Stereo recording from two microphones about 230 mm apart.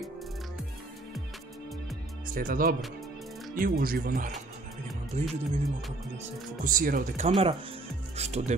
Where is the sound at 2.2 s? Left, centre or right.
Right.